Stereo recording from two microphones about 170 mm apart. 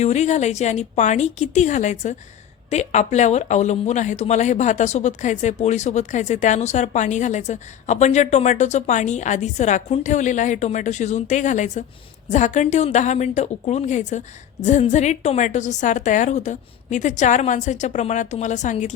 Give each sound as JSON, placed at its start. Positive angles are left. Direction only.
{"t": 0.0, "sound": "speech", "side_deg": 40}